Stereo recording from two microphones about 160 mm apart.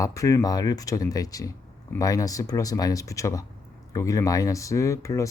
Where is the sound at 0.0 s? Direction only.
20° left (ahead or behind).